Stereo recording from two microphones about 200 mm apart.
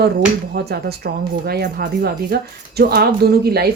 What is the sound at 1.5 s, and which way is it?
Speech, 55° right (ahead or behind).